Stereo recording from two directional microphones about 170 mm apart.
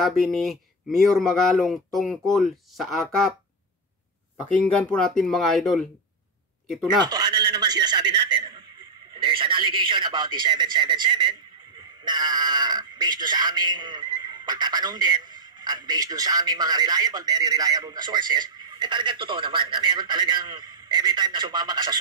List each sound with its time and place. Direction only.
0.0 s speech: centre (ahead or behind)
4.6 s speech: 5° left (ahead or behind)
7.0 s a sound: 25° right (ahead or behind)
9.1 s speech: 30° right (ahead or behind)